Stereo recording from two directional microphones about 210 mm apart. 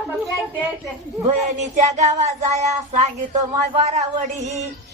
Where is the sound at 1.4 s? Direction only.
35° right (ahead or behind).